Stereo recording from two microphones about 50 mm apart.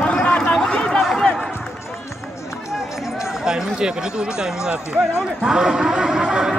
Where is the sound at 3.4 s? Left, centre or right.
Centre.